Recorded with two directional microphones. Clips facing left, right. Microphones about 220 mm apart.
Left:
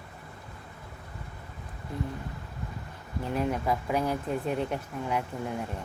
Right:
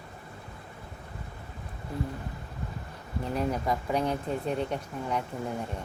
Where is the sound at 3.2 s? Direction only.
Centre (ahead or behind).